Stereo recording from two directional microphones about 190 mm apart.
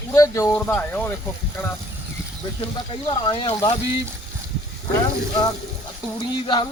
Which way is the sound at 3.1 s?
25° left (ahead or behind).